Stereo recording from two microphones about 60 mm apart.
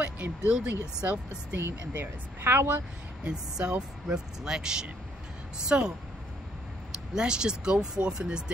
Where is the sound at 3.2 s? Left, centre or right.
Centre.